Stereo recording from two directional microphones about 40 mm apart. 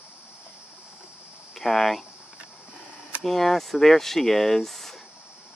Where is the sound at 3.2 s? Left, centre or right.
Centre.